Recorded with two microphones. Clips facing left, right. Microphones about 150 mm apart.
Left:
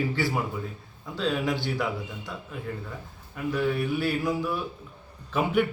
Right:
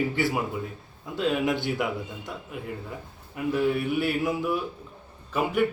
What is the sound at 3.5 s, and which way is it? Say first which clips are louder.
Speech: right 2 dB; 25° right (ahead or behind).